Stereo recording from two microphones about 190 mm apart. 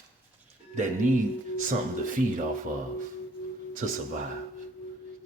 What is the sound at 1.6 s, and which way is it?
Speech, 45° right (ahead or behind).